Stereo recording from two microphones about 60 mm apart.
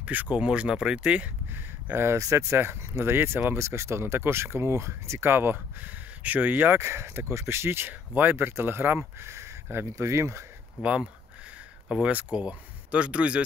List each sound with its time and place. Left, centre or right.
0.0 s speech: right
1.5 s speech: right
2.2 s speech: right
3.5 s speech: right
7.9 s speech: right
10.8 s speech: centre